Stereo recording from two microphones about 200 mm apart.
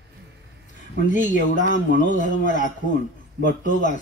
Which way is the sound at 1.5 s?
40° left (ahead or behind).